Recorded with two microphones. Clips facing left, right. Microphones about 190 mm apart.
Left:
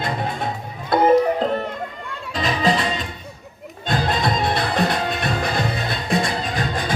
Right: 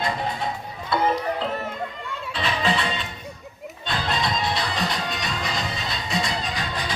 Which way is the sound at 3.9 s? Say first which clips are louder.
Left 5 dB; 50° left (ahead or behind).